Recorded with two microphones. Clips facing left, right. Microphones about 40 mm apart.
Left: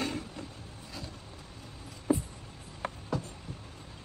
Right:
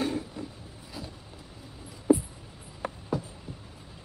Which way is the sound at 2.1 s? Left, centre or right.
Centre.